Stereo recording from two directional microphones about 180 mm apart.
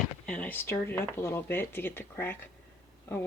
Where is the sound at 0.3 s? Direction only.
10° left (ahead or behind).